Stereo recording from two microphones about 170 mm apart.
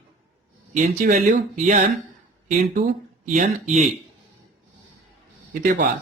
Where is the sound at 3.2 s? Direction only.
50° right (ahead or behind).